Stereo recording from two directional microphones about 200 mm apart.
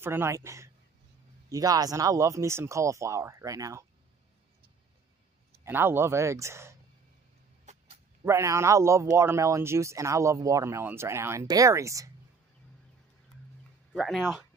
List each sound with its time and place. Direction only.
0.0 s speech: 10° right (ahead or behind)
5.7 s speech: 10° right (ahead or behind)
7.7 s a sound: 35° right (ahead or behind)
8.3 s speech: 15° right (ahead or behind)
13.9 s speech: centre (ahead or behind)